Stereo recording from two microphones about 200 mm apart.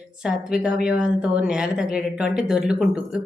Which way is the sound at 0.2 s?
5° right (ahead or behind).